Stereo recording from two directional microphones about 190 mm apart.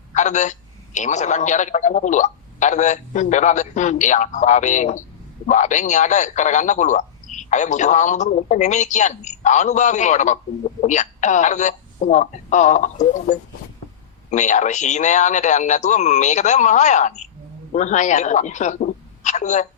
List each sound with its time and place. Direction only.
0.1 s telephone: 40° left (ahead or behind)
0.9 s a man's voice: 40° left (ahead or behind)